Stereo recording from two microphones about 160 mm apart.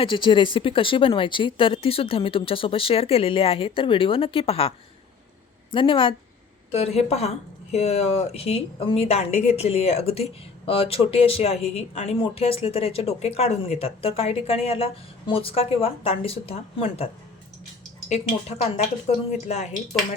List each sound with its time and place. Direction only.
0.0 s speech: 30° left (ahead or behind)
5.7 s speech: 30° left (ahead or behind)
18.1 s speech: 40° left (ahead or behind)